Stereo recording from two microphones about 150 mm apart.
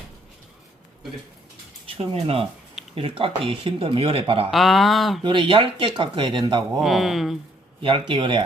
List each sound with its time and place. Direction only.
2.0 s speech: 40° right (ahead or behind)
4.5 s speech: centre (ahead or behind)
5.2 s speech: 35° right (ahead or behind)
6.7 s speech: centre (ahead or behind)
7.8 s speech: 35° right (ahead or behind)